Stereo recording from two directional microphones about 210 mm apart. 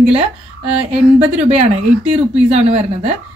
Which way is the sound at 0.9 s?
30° right (ahead or behind).